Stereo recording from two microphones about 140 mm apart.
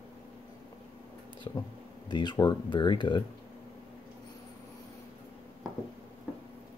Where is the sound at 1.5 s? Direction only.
35° left (ahead or behind).